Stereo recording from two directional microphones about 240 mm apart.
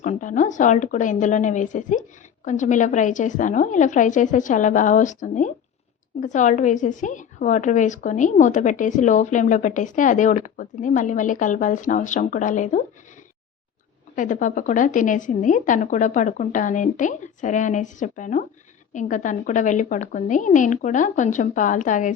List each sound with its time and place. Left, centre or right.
0.0 s a woman's voice: left
14.2 s a woman's voice: left